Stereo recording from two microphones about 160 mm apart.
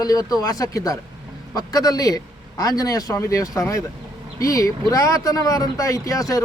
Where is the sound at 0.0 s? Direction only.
25° left (ahead or behind).